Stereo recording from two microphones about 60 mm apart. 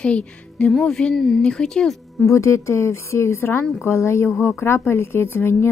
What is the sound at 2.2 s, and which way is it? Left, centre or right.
A woman's voice, left.